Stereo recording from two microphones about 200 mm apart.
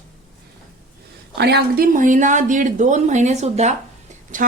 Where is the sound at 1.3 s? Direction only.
55° right (ahead or behind).